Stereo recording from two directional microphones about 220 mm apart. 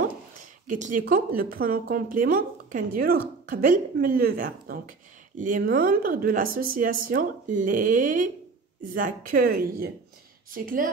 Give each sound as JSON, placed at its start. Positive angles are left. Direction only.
{"t": 0.7, "sound": "a woman's voice", "side_deg": -35}